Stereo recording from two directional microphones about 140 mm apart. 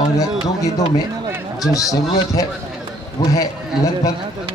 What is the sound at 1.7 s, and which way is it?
Speech, 25° left (ahead or behind).